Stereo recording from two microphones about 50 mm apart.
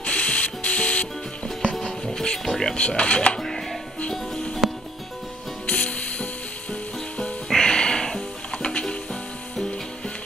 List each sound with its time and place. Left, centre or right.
0.0 s printer: left
1.6 s speech: centre
3.3 s music: centre
4.6 s music: centre
5.7 s music: left
7.4 s music: centre